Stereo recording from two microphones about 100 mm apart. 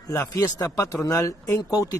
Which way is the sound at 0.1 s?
35° left (ahead or behind).